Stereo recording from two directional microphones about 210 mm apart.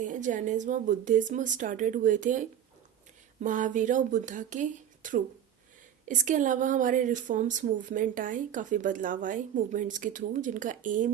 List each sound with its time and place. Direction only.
0.0 s a woman's voice: 35° right (ahead or behind)